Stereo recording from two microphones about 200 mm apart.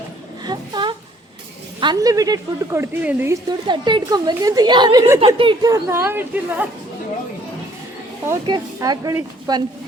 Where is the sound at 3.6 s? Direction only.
25° right (ahead or behind).